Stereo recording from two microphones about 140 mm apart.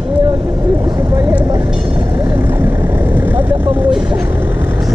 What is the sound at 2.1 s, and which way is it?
Vehicle, 15° right (ahead or behind).